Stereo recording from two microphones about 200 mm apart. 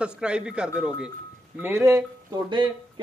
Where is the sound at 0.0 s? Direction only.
5° right (ahead or behind).